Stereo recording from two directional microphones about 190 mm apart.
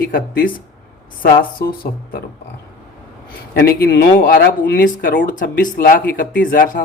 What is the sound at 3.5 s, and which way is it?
Speech, 55° left (ahead or behind).